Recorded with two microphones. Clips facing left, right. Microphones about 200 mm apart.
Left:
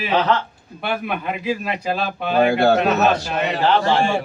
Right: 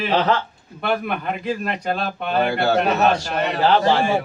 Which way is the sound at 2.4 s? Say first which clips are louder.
Left 5 dB; 50° left (ahead or behind).